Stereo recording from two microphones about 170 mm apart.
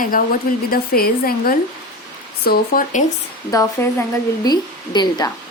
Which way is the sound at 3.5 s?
15° left (ahead or behind).